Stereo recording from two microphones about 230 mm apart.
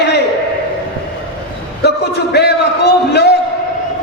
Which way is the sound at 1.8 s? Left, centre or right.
Left.